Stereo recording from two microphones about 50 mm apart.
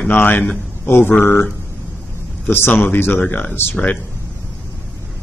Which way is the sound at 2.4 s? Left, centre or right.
Left.